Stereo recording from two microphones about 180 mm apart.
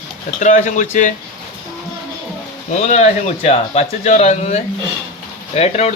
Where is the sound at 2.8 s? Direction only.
40° left (ahead or behind).